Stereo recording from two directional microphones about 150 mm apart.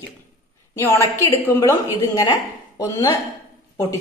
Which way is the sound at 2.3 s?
25° left (ahead or behind).